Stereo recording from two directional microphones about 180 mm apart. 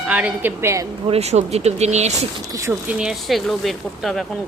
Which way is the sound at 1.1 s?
35° right (ahead or behind).